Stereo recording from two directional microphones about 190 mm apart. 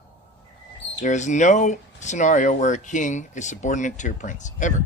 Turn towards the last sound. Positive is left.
turn(degrees=40)  # may be behind; listen again after turning